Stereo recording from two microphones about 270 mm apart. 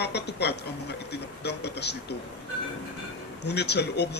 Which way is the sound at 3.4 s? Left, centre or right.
Left.